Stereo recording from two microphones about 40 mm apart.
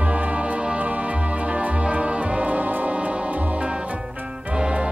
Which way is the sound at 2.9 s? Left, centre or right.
Right.